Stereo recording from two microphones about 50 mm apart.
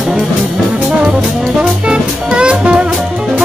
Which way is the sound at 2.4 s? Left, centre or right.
Right.